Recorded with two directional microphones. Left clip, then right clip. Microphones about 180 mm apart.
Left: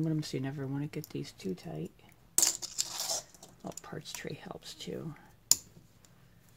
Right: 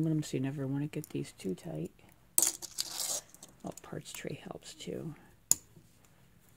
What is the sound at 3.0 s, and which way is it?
Speech, 35° right (ahead or behind).